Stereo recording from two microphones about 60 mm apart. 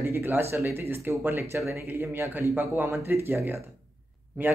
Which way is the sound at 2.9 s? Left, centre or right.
Right.